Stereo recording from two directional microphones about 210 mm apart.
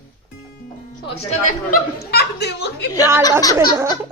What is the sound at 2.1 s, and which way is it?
Speech, 50° left (ahead or behind).